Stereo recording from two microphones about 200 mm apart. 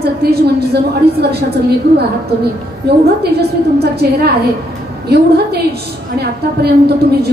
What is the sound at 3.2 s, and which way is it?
A woman's voice, 55° right (ahead or behind).